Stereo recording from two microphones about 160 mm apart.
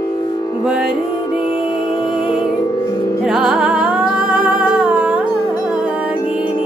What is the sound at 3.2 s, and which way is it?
Music, 5° right (ahead or behind).